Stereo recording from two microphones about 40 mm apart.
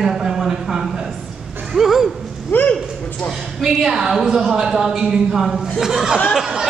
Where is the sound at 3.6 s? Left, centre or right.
Centre.